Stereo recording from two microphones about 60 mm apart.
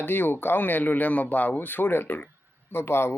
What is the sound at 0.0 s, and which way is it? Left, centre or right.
Speech, left.